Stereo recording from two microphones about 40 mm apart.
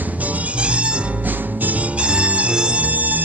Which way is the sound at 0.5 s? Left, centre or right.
Right.